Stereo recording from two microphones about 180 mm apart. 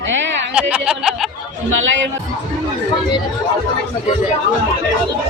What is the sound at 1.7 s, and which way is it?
Speech, 90° right.